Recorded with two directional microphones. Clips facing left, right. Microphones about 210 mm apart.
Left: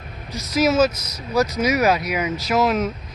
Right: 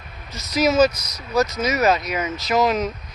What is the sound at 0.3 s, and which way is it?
A man's voice, 5° left (ahead or behind).